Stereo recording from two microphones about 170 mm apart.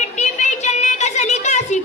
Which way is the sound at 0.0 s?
45° left (ahead or behind).